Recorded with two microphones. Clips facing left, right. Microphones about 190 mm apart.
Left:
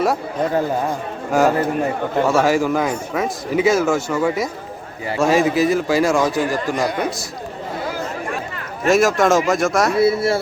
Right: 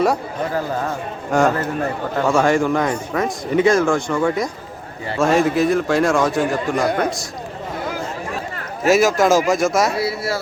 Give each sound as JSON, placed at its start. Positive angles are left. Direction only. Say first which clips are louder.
{"t": 1.3, "sound": "speech", "louder": "left 1 dB", "side_deg": 5}
{"t": 1.5, "sound": "a man's voice", "louder": "left 3 dB", "side_deg": 15}
{"t": 2.2, "sound": "speech", "louder": "right 1 dB", "side_deg": 5}
{"t": 8.9, "sound": "speech", "louder": "even", "side_deg": 0}
{"t": 10.0, "sound": "speech", "louder": "left 6 dB", "side_deg": 25}